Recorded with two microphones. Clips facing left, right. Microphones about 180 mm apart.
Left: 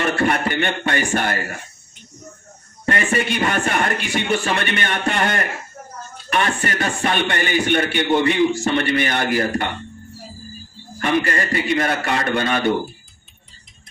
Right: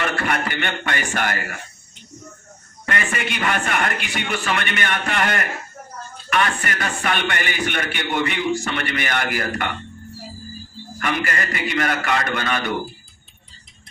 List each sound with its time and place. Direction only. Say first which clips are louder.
0.0 s a man's voice: left 4 dB; 30° left (ahead or behind)
2.8 s a man's voice: left 5 dB; 30° left (ahead or behind)
11.0 s a man's voice: left 5 dB; 30° left (ahead or behind)